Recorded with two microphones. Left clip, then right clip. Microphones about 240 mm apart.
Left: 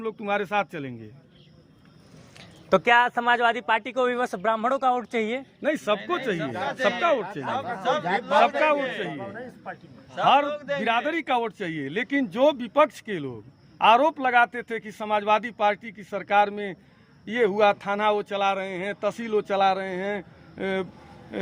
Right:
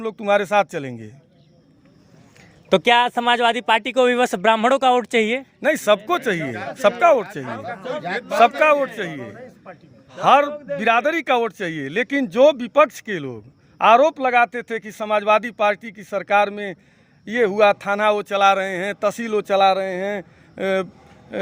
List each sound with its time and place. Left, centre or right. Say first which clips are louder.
0.0 s speech: right 8 dB; right
2.6 s speech: right 4 dB; right
7.4 s speech: left 1 dB; right
8.4 s a man's voice: right 7 dB; right